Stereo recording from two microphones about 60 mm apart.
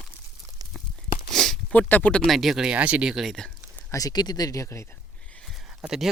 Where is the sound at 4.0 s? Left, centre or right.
Left.